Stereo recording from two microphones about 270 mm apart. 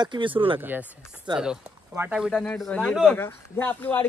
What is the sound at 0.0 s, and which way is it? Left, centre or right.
Speech, centre.